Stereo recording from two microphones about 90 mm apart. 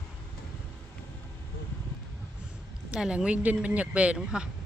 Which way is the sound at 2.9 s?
10° right (ahead or behind).